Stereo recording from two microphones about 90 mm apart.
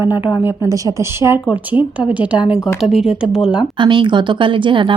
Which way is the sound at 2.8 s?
5° right (ahead or behind).